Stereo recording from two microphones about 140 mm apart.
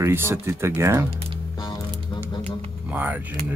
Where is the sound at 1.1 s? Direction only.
40° right (ahead or behind).